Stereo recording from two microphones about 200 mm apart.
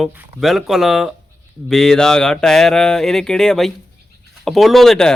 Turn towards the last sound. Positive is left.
turn(degrees=0)  # may be behind; listen again after turning